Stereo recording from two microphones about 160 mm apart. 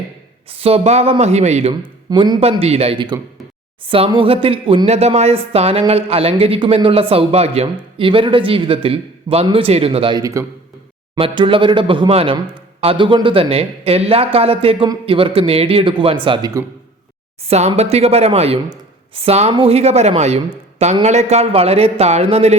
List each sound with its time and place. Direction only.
0.5 s a man's voice: 40° right (ahead or behind)
2.0 s speech: 25° right (ahead or behind)
2.4 s speech: 40° right (ahead or behind)
17.5 s speech: 40° right (ahead or behind)